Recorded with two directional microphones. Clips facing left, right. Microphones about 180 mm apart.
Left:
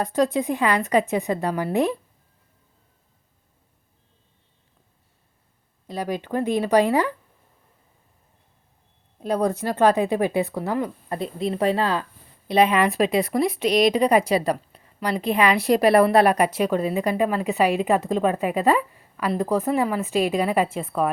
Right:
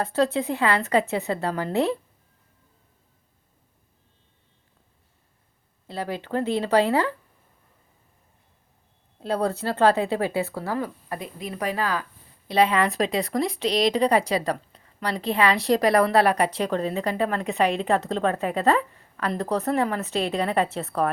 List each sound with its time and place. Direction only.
0.0 s a woman's voice: 15° left (ahead or behind)
5.9 s a woman's voice: 15° left (ahead or behind)
9.2 s a woman's voice: 15° left (ahead or behind)
12.5 s a woman's voice: 15° left (ahead or behind)